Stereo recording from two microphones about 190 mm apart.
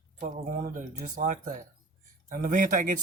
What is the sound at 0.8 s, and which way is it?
Speech, 45° right (ahead or behind).